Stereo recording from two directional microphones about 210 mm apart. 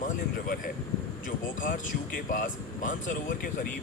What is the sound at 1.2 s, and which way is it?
Speech, 40° left (ahead or behind).